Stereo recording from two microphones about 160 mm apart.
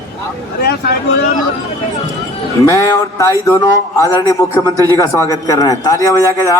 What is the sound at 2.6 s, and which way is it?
A man's voice, 20° left (ahead or behind).